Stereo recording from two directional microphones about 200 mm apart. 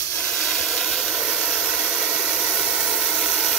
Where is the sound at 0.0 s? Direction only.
5° left (ahead or behind).